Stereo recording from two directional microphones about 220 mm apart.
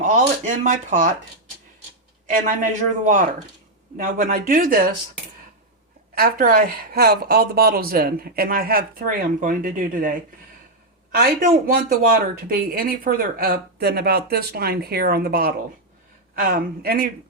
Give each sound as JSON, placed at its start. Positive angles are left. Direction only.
{"t": 0.0, "sound": "speech", "side_deg": -35}
{"t": 2.2, "sound": "speech", "side_deg": -35}
{"t": 6.1, "sound": "speech", "side_deg": -40}